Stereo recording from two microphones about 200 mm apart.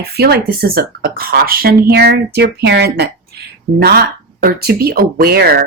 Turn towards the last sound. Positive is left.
turn(degrees=-50)  # may be behind; listen again after turning